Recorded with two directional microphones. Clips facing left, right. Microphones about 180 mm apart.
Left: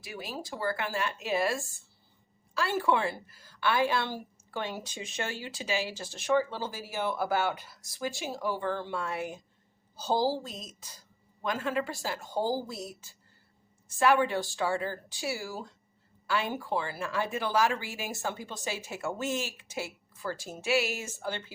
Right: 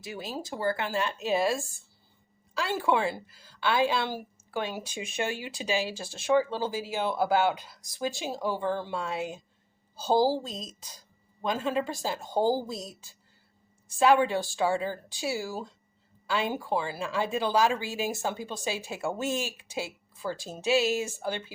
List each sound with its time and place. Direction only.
0.0 s a woman's voice: 25° right (ahead or behind)